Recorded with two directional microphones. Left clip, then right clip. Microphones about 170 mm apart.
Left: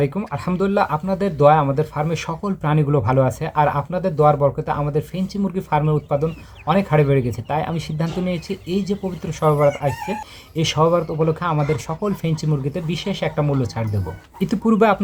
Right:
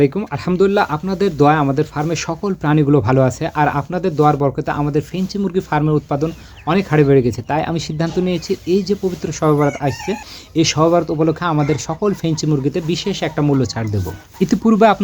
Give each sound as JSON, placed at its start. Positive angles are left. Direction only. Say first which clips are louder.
{"t": 0.0, "sound": "speech", "louder": "right 6 dB", "side_deg": -30}